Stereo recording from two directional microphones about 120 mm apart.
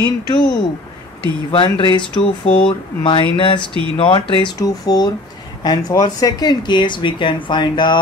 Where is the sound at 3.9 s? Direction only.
45° left (ahead or behind).